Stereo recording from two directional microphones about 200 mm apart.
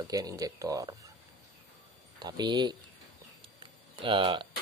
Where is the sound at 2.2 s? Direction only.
20° right (ahead or behind).